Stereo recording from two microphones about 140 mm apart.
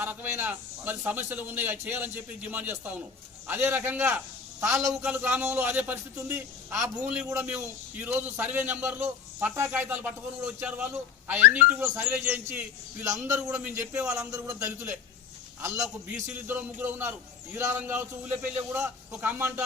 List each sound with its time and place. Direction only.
0.0 s a man's voice: 15° right (ahead or behind)
14.2 s a man's voice: 25° right (ahead or behind)
16.5 s a man's voice: 15° right (ahead or behind)